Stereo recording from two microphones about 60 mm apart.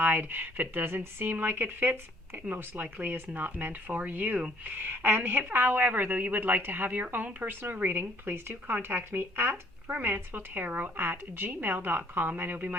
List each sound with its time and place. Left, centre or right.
0.0 s a woman's voice: right